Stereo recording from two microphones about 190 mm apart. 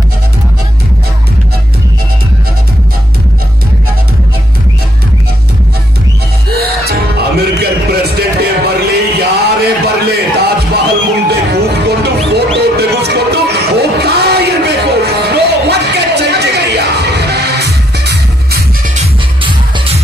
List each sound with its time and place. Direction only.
6.5 s music: 55° right (ahead or behind)
11.2 s a sound: 60° right (ahead or behind)
18.9 s music: 30° right (ahead or behind)